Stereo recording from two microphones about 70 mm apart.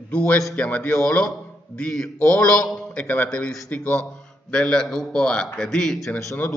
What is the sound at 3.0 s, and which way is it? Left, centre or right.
A man's voice, left.